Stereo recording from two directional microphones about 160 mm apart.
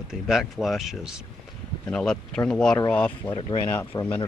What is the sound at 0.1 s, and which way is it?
Speech, centre (ahead or behind).